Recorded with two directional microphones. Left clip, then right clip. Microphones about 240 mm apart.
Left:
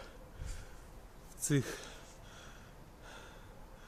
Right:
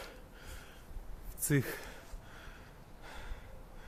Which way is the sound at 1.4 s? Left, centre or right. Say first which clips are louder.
Right 1 dB; centre.